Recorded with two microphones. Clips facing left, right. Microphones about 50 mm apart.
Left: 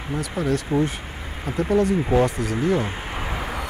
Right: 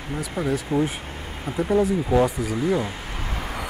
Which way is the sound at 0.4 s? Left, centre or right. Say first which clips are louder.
Left 1 dB; centre.